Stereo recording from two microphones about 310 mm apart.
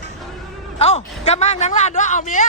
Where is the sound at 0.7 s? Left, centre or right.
Left.